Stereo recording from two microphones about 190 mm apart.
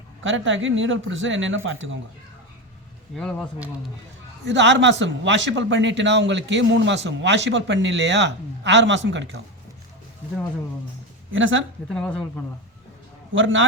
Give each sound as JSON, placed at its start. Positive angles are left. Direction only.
{"t": 0.2, "sound": "a man's voice", "side_deg": -85}
{"t": 3.2, "sound": "speech", "side_deg": 5}
{"t": 4.4, "sound": "a man's voice", "side_deg": -70}
{"t": 11.3, "sound": "a man's voice", "side_deg": -90}
{"t": 11.9, "sound": "speech", "side_deg": 5}
{"t": 13.3, "sound": "a man's voice", "side_deg": -85}